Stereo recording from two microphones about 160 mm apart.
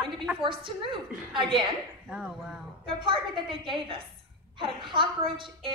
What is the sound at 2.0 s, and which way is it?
Speech, 5° right (ahead or behind).